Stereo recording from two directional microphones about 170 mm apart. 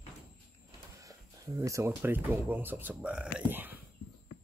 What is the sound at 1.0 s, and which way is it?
Speech, 20° right (ahead or behind).